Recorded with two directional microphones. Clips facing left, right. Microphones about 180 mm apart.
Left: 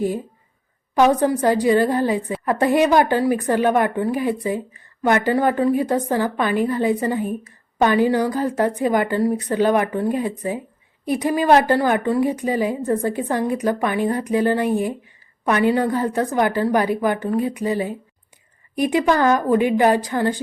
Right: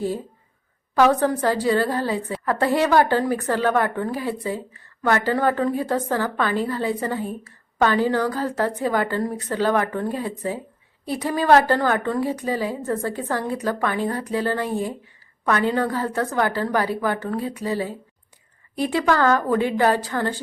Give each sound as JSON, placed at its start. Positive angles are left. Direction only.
{"t": 0.9, "sound": "speech", "side_deg": 15}